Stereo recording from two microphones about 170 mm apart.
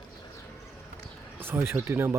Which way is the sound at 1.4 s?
10° right (ahead or behind).